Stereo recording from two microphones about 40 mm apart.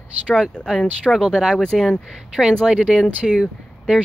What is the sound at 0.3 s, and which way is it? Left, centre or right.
Speech, left.